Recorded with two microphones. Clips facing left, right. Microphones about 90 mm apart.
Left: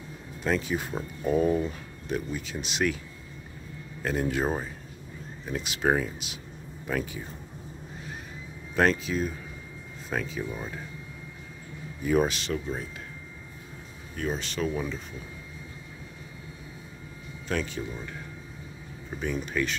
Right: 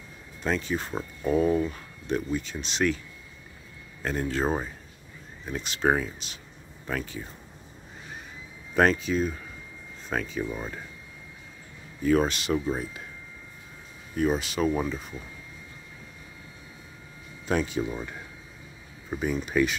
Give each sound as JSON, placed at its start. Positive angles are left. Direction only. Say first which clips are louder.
{"t": 0.4, "sound": "speech", "louder": "even", "side_deg": 5}
{"t": 4.0, "sound": "speech", "louder": "even", "side_deg": 5}
{"t": 5.5, "sound": "speech", "louder": "right 1 dB", "side_deg": 5}
{"t": 8.7, "sound": "speech", "louder": "right 2 dB", "side_deg": 0}
{"t": 12.0, "sound": "speech", "louder": "right 2 dB", "side_deg": 10}
{"t": 12.5, "sound": "speech", "louder": "right 5 dB", "side_deg": -20}
{"t": 14.1, "sound": "speech", "louder": "right 6 dB", "side_deg": -10}
{"t": 17.5, "sound": "speech", "louder": "right 4 dB", "side_deg": -15}
{"t": 19.1, "sound": "speech", "louder": "right 4 dB", "side_deg": -10}